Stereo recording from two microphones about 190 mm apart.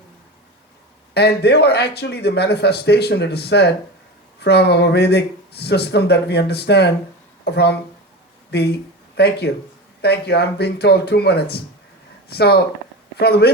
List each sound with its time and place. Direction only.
1.1 s a man's voice: 60° left (ahead or behind)